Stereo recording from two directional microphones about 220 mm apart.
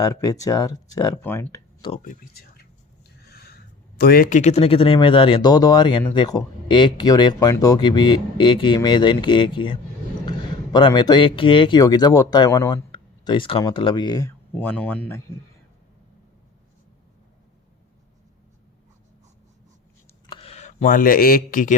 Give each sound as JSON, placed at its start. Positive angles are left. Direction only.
{"t": 0.0, "sound": "speech", "side_deg": 15}
{"t": 2.0, "sound": "speech", "side_deg": 45}
{"t": 3.2, "sound": "a sound", "side_deg": 45}
{"t": 3.9, "sound": "speech", "side_deg": 40}
{"t": 20.3, "sound": "speech", "side_deg": 25}